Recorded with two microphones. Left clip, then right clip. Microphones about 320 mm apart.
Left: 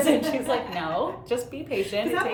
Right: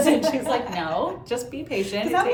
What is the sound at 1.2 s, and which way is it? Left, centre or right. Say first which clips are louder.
Speech: even; centre.